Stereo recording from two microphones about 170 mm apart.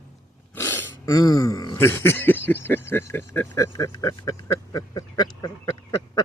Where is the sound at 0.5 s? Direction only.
15° left (ahead or behind).